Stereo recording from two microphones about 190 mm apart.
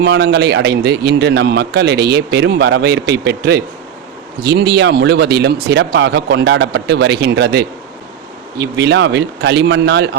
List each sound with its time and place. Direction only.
0.0 s a man's voice: 65° right (ahead or behind)